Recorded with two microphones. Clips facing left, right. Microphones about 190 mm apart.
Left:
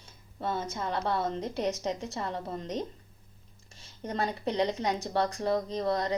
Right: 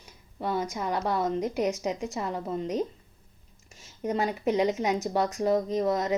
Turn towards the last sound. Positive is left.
turn(degrees=-15)  # may be behind; listen again after turning